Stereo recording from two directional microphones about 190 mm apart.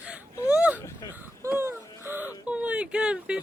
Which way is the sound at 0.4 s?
5° right (ahead or behind).